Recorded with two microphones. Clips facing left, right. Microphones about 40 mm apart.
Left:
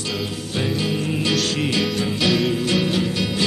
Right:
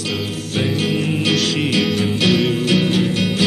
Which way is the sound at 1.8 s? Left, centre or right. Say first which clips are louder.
Right 3 dB; centre.